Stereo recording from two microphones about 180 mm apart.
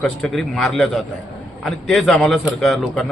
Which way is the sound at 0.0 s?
Centre (ahead or behind).